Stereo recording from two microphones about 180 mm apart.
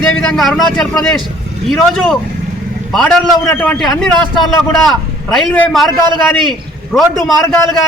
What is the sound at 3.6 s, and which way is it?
A man's voice, 5° left (ahead or behind).